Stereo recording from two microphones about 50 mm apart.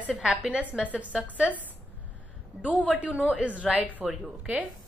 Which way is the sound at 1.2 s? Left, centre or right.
Right.